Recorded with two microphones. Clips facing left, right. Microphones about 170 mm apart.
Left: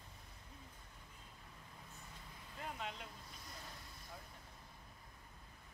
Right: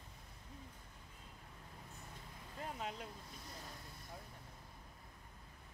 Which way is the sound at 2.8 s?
40° right (ahead or behind).